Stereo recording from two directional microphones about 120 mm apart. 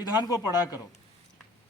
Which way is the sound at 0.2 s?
30° left (ahead or behind).